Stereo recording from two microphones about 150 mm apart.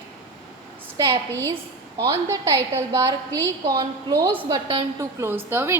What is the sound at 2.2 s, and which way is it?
A woman's voice, 20° right (ahead or behind).